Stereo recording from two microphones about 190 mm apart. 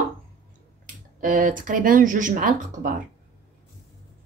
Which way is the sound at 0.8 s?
45° right (ahead or behind).